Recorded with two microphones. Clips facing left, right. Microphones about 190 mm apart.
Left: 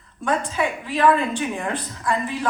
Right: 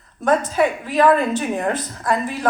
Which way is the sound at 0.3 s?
45° right (ahead or behind).